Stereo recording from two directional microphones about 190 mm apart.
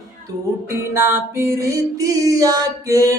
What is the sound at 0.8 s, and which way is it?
Music, 10° right (ahead or behind).